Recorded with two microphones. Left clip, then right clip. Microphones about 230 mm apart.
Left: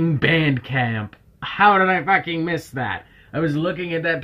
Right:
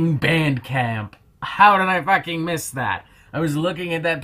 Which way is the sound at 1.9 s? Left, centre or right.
Left.